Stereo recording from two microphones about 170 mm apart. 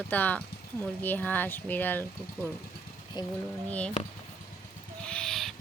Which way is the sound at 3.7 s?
5° left (ahead or behind).